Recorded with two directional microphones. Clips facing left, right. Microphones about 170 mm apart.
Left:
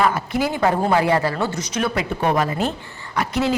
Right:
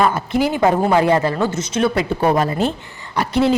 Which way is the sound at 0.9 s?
20° right (ahead or behind).